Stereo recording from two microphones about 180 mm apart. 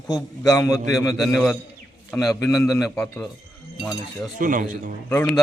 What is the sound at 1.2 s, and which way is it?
Speech, 5° left (ahead or behind).